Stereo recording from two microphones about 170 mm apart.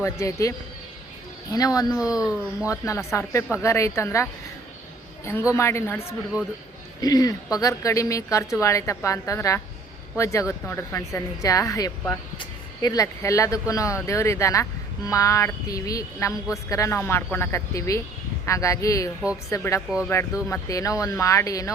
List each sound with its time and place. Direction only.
0.0 s a woman's voice: 15° left (ahead or behind)